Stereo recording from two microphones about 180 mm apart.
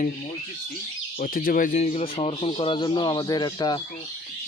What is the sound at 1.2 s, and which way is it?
Speech, 50° left (ahead or behind).